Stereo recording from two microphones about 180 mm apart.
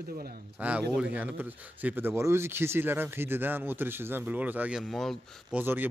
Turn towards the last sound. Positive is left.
turn(degrees=-10)  # may be behind; listen again after turning